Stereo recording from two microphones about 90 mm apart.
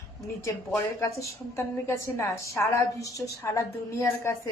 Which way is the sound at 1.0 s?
35° left (ahead or behind).